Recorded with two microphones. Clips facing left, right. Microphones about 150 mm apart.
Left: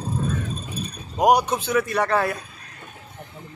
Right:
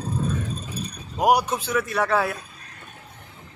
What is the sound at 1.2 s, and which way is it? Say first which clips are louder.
Speech: left 2 dB; 5° right (ahead or behind).